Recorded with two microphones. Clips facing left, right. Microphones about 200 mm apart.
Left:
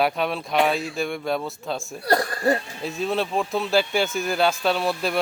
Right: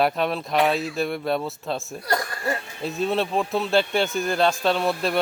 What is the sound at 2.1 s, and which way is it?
Speech, 35° left (ahead or behind).